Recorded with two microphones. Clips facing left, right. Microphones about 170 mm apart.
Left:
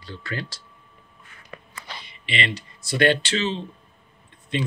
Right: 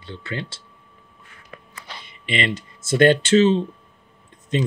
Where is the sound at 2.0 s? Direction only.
45° right (ahead or behind).